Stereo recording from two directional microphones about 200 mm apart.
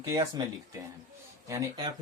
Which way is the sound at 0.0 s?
15° right (ahead or behind).